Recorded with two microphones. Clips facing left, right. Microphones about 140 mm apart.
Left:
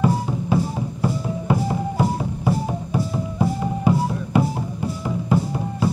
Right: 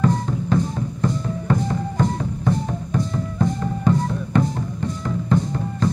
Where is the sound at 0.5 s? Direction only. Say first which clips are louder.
Even; 10° left (ahead or behind).